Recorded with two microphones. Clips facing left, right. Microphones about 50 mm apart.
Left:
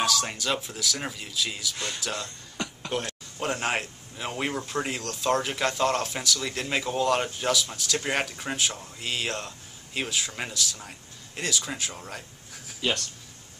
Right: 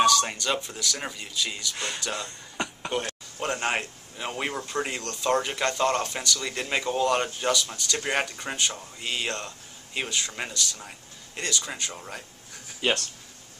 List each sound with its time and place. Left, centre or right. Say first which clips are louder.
0.0 s speech: right 5 dB; centre
2.5 s a sound: right 3 dB; right
3.3 s speech: even; centre